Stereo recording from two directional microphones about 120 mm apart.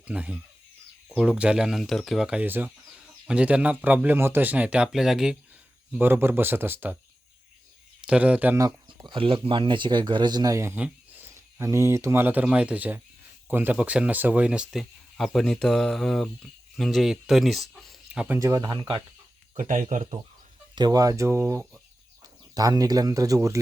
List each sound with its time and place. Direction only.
0.0 s speech: 10° right (ahead or behind)
6.0 s speech: 20° right (ahead or behind)
8.0 s speech: 10° right (ahead or behind)
8.5 s a sound: 25° right (ahead or behind)
9.0 s speech: 50° right (ahead or behind); by 10.8 s 25° right (ahead or behind)
10.8 s a sound: 15° right (ahead or behind)
11.6 s speech: 25° right (ahead or behind); by 18.3 s 10° right (ahead or behind)
18.3 s speech: 30° right (ahead or behind)
19.5 s speech: 90° right
20.7 s speech: 35° right (ahead or behind)